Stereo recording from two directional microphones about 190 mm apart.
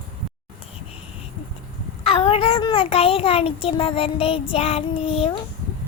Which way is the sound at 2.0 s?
30° left (ahead or behind).